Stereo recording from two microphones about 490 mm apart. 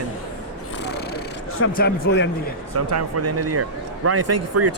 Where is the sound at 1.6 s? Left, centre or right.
Centre.